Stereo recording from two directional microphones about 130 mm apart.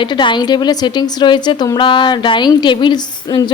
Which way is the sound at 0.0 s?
40° left (ahead or behind).